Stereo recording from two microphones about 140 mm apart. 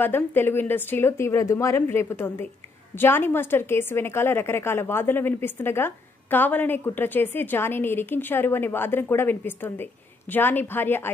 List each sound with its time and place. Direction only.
0.0 s a woman's voice: 15° left (ahead or behind)